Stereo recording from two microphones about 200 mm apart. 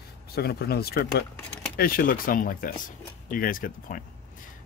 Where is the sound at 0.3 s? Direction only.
50° left (ahead or behind).